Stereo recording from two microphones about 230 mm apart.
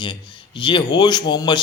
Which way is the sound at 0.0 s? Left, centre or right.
Centre.